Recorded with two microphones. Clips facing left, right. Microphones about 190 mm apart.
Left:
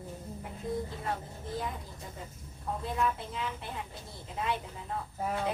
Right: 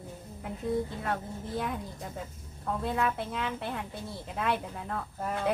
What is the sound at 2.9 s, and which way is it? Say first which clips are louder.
Speech: right 2 dB; 65° right (ahead or behind).